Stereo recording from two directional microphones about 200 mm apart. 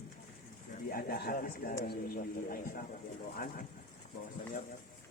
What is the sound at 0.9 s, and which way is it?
A man's voice, 50° left (ahead or behind).